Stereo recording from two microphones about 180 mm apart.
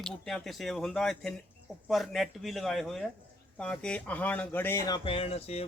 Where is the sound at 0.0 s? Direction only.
Centre (ahead or behind).